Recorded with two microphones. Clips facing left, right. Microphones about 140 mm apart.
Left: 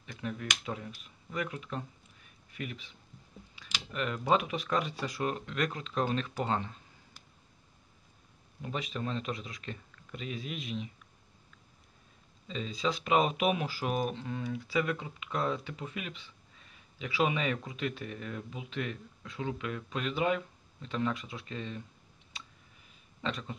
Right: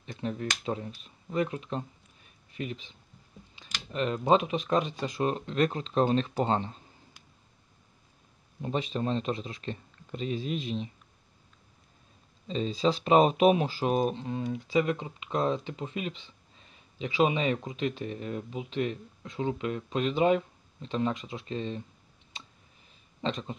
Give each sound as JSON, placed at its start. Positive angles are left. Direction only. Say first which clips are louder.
{"t": 0.0, "sound": "speech", "louder": "right 5 dB", "side_deg": -30}
{"t": 8.6, "sound": "speech", "louder": "right 6 dB", "side_deg": -30}
{"t": 12.4, "sound": "speech", "louder": "right 6 dB", "side_deg": -30}
{"t": 23.2, "sound": "speech", "louder": "right 4 dB", "side_deg": -25}